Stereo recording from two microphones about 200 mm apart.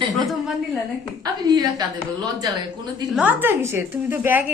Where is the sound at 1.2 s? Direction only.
20° right (ahead or behind).